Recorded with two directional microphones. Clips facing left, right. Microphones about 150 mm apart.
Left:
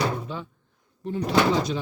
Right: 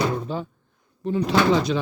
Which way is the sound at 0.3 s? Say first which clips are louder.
Right 5 dB; 35° right (ahead or behind).